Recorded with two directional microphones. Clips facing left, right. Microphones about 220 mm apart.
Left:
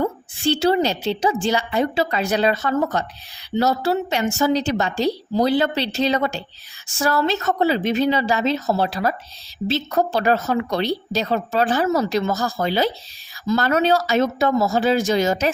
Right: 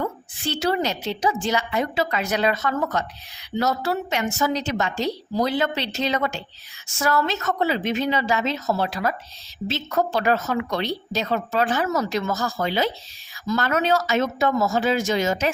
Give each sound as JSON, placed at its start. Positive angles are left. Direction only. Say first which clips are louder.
{"t": 0.0, "sound": "speech", "louder": "left 6 dB", "side_deg": 30}